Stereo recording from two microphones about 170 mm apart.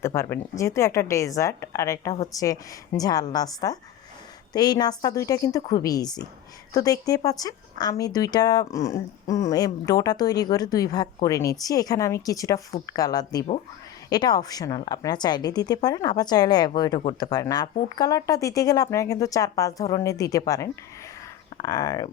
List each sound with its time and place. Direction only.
0.0 s a woman's voice: 15° left (ahead or behind)